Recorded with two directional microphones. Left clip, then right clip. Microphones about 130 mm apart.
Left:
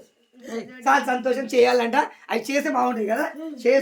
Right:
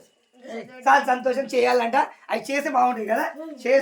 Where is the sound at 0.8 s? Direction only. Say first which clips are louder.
Right 2 dB; 45° left (ahead or behind); by 3.2 s 30° left (ahead or behind).